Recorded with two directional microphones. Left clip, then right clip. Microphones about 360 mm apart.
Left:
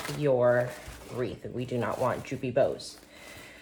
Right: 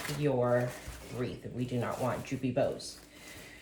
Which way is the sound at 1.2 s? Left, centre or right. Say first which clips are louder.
Left 4 dB; left.